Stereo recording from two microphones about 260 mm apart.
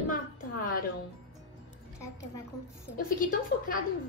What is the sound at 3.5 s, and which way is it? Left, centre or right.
Speech, left.